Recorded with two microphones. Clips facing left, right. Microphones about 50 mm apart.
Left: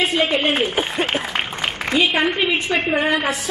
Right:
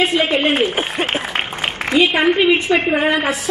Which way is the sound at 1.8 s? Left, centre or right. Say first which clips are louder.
Right 3 dB; right.